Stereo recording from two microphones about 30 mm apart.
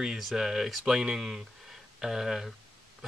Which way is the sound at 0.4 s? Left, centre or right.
Centre.